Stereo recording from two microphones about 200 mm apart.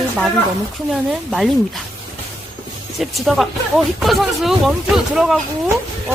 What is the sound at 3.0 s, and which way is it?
Speech, centre (ahead or behind).